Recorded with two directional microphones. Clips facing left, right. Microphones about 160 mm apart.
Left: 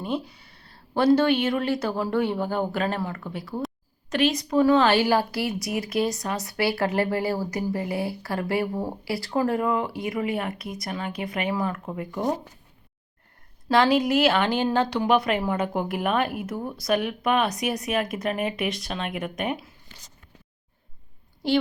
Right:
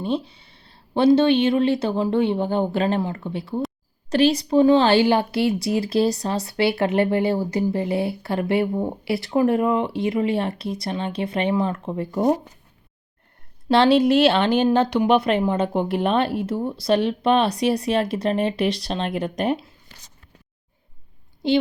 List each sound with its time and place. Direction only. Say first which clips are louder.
0.0 s speech: right 4 dB; 25° right (ahead or behind)
13.7 s speech: right 4 dB; 25° right (ahead or behind)